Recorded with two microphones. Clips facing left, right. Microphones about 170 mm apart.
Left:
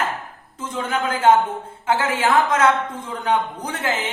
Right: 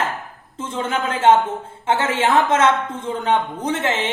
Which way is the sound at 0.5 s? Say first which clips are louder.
Right 1 dB; 25° right (ahead or behind).